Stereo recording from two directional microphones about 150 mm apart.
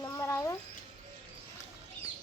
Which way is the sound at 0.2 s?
15° left (ahead or behind).